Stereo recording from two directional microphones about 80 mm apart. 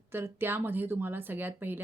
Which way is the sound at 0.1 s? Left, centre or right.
Right.